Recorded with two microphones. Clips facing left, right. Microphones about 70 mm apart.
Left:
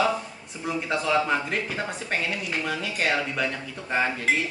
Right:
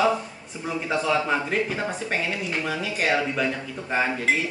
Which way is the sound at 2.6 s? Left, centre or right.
Centre.